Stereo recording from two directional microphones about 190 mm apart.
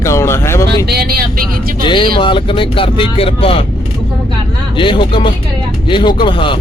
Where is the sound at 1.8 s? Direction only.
25° left (ahead or behind).